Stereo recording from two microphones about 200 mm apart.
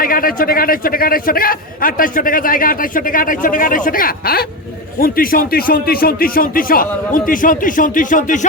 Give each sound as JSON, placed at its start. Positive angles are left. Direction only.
{"t": 0.0, "sound": "a man's voice", "side_deg": 45}